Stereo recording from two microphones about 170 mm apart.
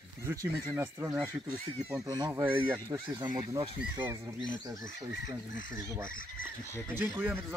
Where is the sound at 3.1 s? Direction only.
20° right (ahead or behind).